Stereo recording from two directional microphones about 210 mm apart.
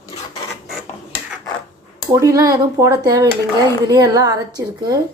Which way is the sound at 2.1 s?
15° right (ahead or behind).